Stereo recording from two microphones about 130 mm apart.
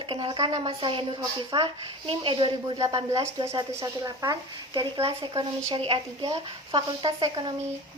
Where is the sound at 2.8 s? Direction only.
25° right (ahead or behind).